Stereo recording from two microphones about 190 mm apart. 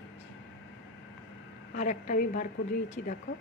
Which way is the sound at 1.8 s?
45° left (ahead or behind).